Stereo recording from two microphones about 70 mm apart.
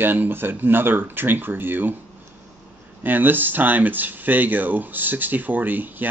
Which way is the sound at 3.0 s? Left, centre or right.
Right.